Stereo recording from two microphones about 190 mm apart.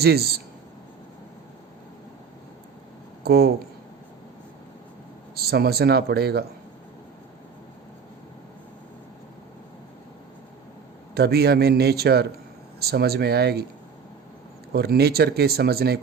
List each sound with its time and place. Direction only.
0.0 s speech: 55° right (ahead or behind)
3.2 s speech: 55° right (ahead or behind)
5.3 s speech: 55° right (ahead or behind)
11.1 s speech: 55° right (ahead or behind)
14.7 s speech: 55° right (ahead or behind)